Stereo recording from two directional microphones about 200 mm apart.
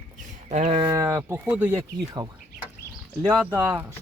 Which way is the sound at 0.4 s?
35° right (ahead or behind).